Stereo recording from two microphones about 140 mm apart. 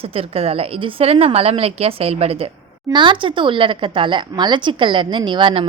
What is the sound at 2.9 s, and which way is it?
Speech, 35° right (ahead or behind).